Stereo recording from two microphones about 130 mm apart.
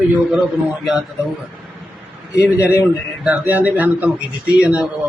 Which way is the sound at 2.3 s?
25° left (ahead or behind).